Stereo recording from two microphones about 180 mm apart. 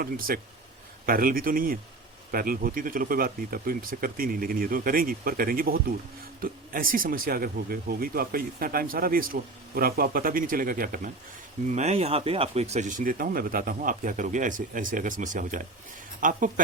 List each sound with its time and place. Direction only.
0.0 s speech: 55° right (ahead or behind)
11.7 s speech: 35° right (ahead or behind)